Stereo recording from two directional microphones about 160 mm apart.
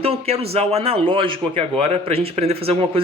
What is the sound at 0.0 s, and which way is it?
A man's voice, 40° right (ahead or behind).